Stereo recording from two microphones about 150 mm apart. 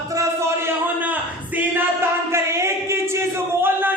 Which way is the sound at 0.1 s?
20° right (ahead or behind).